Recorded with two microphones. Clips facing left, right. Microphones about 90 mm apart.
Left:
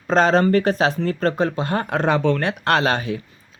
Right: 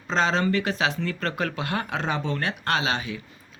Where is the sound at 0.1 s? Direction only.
45° left (ahead or behind).